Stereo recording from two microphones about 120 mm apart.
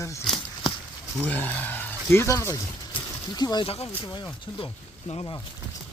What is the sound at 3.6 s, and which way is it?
Speech, 55° left (ahead or behind).